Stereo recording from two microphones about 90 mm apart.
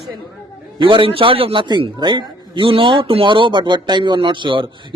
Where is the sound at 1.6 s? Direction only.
55° right (ahead or behind).